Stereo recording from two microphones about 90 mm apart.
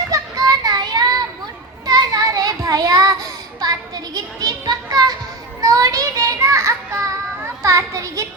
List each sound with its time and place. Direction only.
0.1 s child singing: 40° right (ahead or behind)
3.6 s children playing: 45° right (ahead or behind)
5.5 s music: 40° right (ahead or behind)
7.4 s children playing: 35° right (ahead or behind)